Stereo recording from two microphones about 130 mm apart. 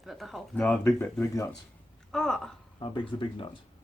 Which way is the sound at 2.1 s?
5° left (ahead or behind).